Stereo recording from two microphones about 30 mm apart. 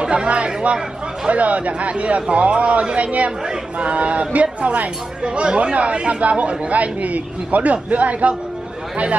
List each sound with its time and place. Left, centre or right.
0.0 s speech: right
1.3 s a man's voice: right
3.0 s a man's voice: right
5.2 s a man's voice: right